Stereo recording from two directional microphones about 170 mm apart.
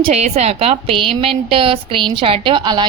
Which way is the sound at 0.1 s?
40° right (ahead or behind).